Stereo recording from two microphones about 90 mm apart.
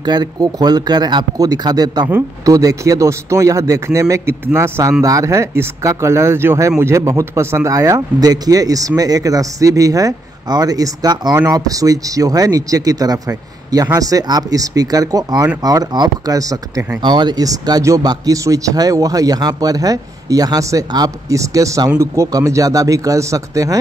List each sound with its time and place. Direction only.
0.0 s a man's voice: 50° right (ahead or behind)
17.0 s speech: 55° right (ahead or behind); by 23.8 s 40° right (ahead or behind)